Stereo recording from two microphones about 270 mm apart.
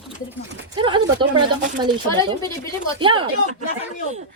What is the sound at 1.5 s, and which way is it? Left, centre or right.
Speech, right.